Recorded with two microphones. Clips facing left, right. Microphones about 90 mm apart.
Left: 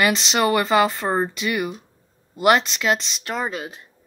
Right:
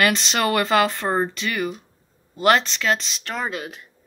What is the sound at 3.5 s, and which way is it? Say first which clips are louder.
Speech: even; 25° left (ahead or behind).